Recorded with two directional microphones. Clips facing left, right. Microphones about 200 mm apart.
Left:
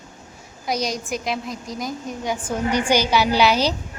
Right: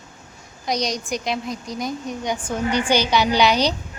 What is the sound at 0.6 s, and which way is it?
A woman's voice, 5° left (ahead or behind).